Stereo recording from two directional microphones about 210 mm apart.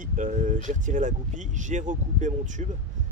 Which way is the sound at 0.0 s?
40° right (ahead or behind).